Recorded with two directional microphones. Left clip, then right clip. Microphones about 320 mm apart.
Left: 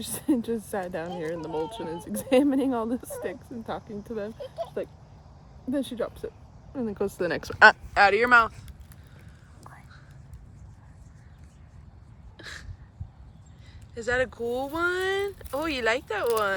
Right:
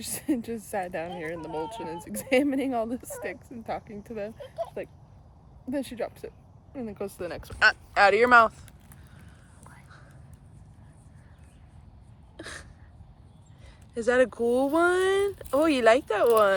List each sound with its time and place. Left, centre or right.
0.0 s a woman's voice: centre
7.9 s speech: centre
12.4 s a sound: centre
13.9 s speech: centre